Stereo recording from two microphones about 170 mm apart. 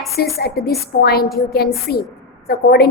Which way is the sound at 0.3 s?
65° left (ahead or behind).